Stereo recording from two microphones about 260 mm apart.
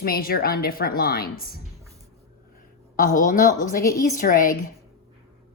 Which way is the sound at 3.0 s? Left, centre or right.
Left.